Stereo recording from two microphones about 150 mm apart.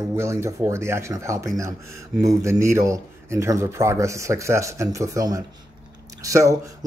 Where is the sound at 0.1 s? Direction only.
20° right (ahead or behind).